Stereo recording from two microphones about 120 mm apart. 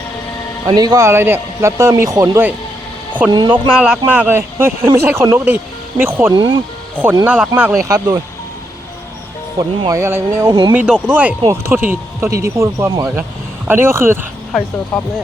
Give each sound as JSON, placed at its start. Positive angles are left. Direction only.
{"t": 0.7, "sound": "a man's voice", "side_deg": -35}
{"t": 3.8, "sound": "a man's voice", "side_deg": -5}
{"t": 6.3, "sound": "speech", "side_deg": -40}
{"t": 6.9, "sound": "speech", "side_deg": -15}
{"t": 7.8, "sound": "a man's voice", "side_deg": -25}
{"t": 9.6, "sound": "a man's voice", "side_deg": -30}
{"t": 14.9, "sound": "speech", "side_deg": 5}